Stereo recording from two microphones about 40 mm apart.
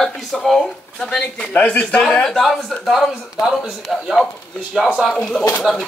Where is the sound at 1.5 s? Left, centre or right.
Left.